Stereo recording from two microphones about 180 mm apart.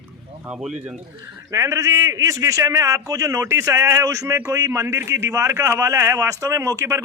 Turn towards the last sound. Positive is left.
turn(degrees=-15)  # may be behind; listen again after turning